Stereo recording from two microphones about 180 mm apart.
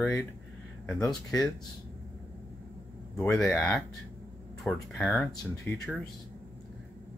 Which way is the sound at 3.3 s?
5° left (ahead or behind).